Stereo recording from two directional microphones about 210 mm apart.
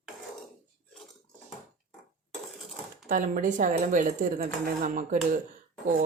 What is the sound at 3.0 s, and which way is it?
Speech, 40° right (ahead or behind).